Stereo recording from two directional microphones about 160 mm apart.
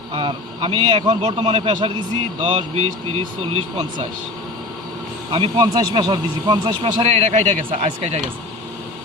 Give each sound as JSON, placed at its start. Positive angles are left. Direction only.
{"t": 0.1, "sound": "speech", "side_deg": -30}
{"t": 5.3, "sound": "speech", "side_deg": -25}
{"t": 7.0, "sound": "speech", "side_deg": -45}